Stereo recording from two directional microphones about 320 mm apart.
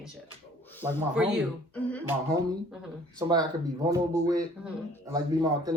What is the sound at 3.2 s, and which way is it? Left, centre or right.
Speech, centre.